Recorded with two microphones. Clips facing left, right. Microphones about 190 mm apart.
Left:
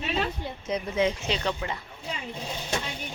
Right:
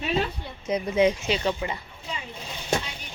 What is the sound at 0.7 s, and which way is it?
Speech, 10° right (ahead or behind).